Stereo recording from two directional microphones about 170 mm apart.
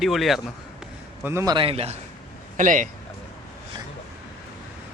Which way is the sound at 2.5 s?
50° right (ahead or behind).